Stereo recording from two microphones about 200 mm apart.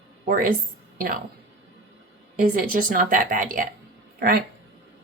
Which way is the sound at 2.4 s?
45° right (ahead or behind).